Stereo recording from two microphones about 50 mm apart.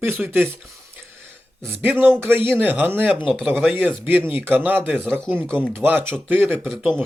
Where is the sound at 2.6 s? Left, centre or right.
Right.